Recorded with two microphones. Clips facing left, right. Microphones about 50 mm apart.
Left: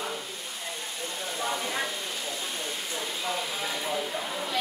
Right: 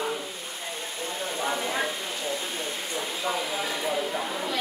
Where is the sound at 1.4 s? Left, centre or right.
Centre.